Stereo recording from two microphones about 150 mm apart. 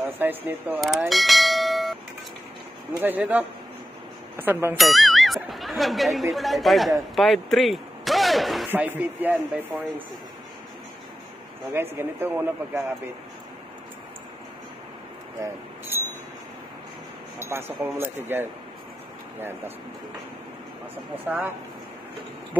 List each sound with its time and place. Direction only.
0.2 s speech: 15° right (ahead or behind)
0.7 s bell: centre (ahead or behind)
3.0 s speech: 10° right (ahead or behind)
4.7 s speech: centre (ahead or behind)
8.7 s speech: 10° right (ahead or behind)
11.7 s speech: 15° right (ahead or behind)
17.4 s speech: 15° right (ahead or behind)
20.9 s speech: 10° right (ahead or behind)